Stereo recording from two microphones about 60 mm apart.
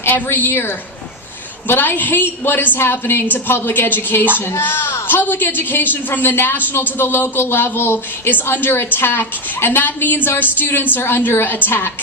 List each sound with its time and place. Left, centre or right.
0.0 s a woman's voice: left